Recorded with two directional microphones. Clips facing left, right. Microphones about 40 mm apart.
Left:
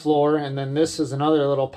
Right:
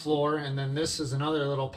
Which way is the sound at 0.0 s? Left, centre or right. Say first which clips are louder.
Left 8 dB; left.